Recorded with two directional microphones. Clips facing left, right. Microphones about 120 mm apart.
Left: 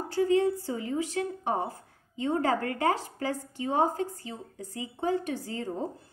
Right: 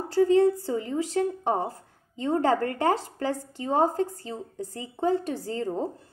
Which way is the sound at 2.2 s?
35° right (ahead or behind).